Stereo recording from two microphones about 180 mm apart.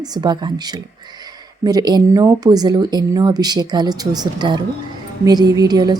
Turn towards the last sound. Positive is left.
turn(degrees=-20)  # may be behind; listen again after turning